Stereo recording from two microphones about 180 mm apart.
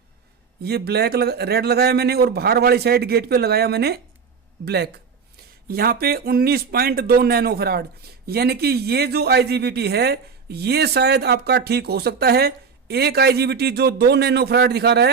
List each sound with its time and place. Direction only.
0.6 s a man's voice: 65° right (ahead or behind)